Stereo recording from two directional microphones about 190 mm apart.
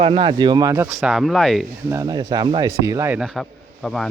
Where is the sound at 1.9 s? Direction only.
20° right (ahead or behind).